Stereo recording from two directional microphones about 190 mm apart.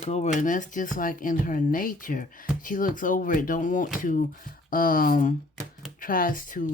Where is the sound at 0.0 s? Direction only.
35° left (ahead or behind).